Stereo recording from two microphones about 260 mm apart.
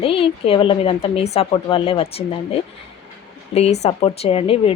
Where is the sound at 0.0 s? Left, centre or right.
Left.